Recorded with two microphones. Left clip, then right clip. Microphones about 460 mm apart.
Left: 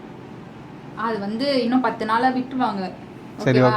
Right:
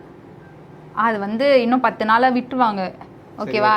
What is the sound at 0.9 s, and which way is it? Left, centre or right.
A woman's voice, right.